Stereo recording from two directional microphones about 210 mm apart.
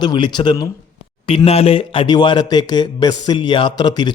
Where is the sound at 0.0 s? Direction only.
20° left (ahead or behind).